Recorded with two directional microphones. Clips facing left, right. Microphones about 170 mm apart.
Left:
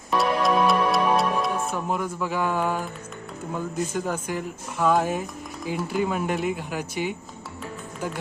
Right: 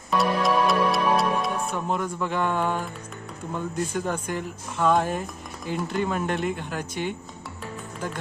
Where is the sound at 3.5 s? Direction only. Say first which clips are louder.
Even; 5° left (ahead or behind).